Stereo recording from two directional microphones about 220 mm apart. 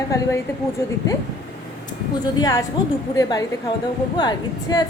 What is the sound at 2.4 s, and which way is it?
A woman's voice, 15° left (ahead or behind).